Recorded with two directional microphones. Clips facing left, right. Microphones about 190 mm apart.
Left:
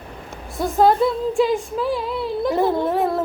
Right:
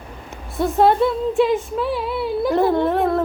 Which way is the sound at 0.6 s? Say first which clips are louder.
Right 1 dB; centre (ahead or behind).